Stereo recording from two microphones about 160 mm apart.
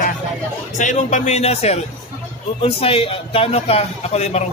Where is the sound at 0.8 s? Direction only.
50° left (ahead or behind).